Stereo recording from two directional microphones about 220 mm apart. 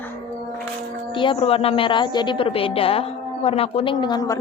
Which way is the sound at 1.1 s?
20° left (ahead or behind).